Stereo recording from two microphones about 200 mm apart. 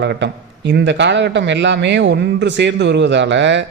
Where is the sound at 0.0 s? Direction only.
60° right (ahead or behind).